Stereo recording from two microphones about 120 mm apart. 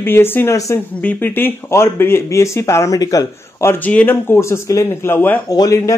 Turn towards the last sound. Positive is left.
turn(degrees=30)  # may be behind; listen again after turning